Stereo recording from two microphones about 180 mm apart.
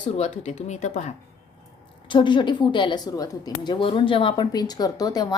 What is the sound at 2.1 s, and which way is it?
A woman's voice, 25° left (ahead or behind).